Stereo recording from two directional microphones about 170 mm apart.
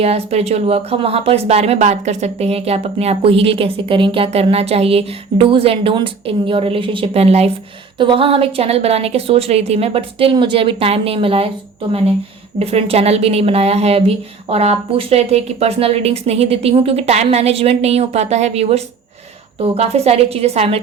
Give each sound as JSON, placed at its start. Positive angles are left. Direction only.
{"t": 0.0, "sound": "speech", "side_deg": -40}